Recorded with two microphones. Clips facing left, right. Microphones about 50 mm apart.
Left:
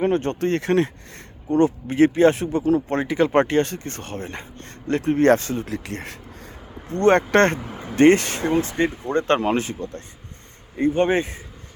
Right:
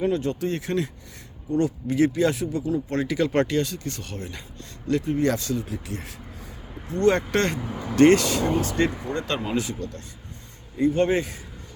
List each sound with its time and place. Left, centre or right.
0.0 s speech: left
1.5 s speech: left
2.9 s speech: left
5.0 s speech: left
5.6 s speech: left
6.8 s speech: left
7.7 s speech: left